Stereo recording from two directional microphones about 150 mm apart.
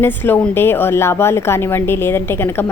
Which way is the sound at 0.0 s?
15° left (ahead or behind).